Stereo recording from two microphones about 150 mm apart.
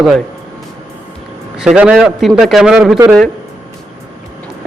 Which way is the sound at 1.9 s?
Centre (ahead or behind).